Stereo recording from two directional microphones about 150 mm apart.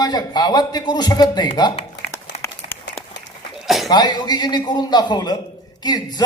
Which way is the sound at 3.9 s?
30° left (ahead or behind).